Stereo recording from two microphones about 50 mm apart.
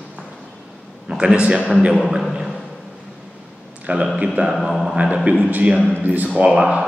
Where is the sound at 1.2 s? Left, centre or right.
Right.